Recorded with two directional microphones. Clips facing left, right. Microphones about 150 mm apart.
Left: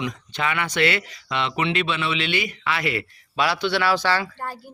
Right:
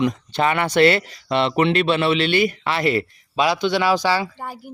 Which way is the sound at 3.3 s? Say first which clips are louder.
Right 3 dB; 15° right (ahead or behind).